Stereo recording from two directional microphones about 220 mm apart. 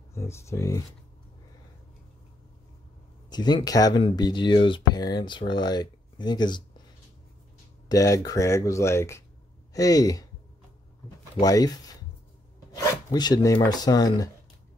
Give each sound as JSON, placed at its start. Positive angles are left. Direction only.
{"t": 0.1, "sound": "speech", "side_deg": 10}
{"t": 3.3, "sound": "speech", "side_deg": 20}
{"t": 7.9, "sound": "speech", "side_deg": 15}
{"t": 11.3, "sound": "speech", "side_deg": 15}